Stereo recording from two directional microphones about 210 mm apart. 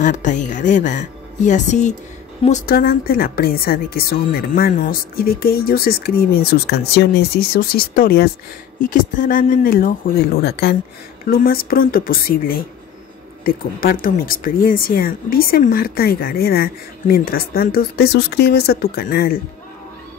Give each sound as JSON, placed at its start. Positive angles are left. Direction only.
{"t": 0.0, "sound": "speech", "side_deg": 35}
{"t": 2.6, "sound": "speech", "side_deg": 45}